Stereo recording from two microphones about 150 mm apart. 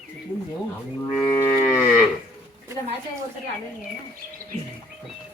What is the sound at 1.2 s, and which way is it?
Moo, 20° left (ahead or behind).